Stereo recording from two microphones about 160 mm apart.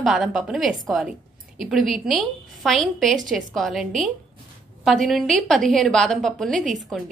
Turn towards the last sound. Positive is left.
turn(degrees=0)  # may be behind; listen again after turning